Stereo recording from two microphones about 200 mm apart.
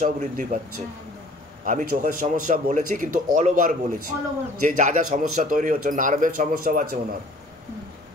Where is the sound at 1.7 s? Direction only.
40° right (ahead or behind).